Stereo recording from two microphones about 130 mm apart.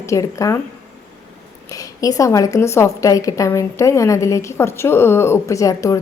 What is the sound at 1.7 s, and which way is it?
A woman's voice, 25° left (ahead or behind).